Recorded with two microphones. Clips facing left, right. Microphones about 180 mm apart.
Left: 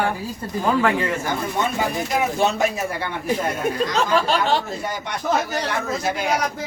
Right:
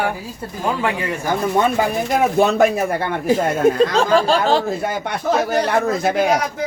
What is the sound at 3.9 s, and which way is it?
Speech, 30° right (ahead or behind).